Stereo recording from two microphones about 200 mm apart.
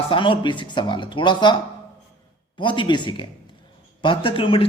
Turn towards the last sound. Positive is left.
turn(degrees=25)  # may be behind; listen again after turning